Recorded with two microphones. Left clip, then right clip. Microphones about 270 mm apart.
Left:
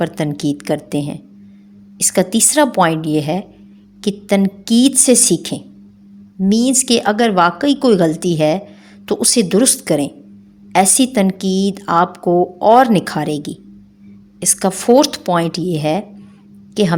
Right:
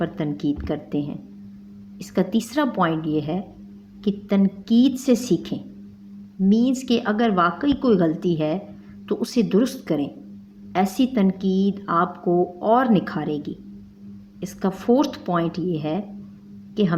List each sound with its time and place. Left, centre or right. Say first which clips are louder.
0.0 s a woman's voice: left 7 dB; left